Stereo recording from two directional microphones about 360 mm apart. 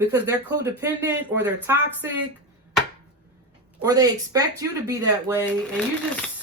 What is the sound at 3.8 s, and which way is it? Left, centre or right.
Speech, centre.